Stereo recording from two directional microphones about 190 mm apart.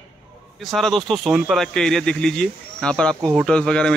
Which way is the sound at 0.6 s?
Centre (ahead or behind).